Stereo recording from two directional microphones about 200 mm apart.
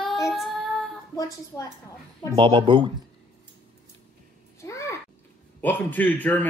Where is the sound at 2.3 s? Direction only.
25° right (ahead or behind).